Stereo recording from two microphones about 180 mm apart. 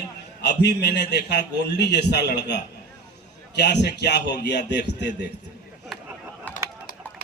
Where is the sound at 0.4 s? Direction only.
65° left (ahead or behind).